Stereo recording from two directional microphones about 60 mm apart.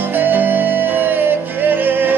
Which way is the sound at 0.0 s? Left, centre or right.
Right.